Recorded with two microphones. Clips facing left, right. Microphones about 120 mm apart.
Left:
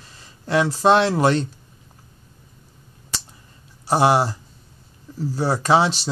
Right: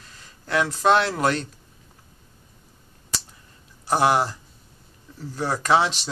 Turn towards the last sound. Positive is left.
turn(degrees=30)  # may be behind; listen again after turning